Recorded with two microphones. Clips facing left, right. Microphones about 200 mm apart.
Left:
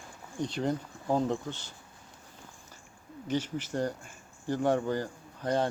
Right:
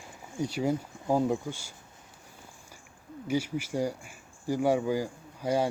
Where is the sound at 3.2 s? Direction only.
10° right (ahead or behind).